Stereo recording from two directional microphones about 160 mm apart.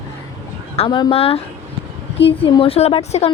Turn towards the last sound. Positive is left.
turn(degrees=40)  # may be behind; listen again after turning